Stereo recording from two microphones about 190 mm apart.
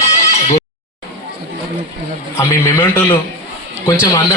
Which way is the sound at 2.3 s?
15° left (ahead or behind).